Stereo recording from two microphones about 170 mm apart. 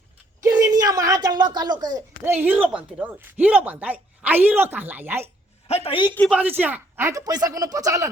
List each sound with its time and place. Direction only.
0.4 s a sound: 20° right (ahead or behind)
2.2 s speech: 15° right (ahead or behind)
5.6 s a woman's voice: 35° left (ahead or behind)
6.3 s speech: 10° right (ahead or behind)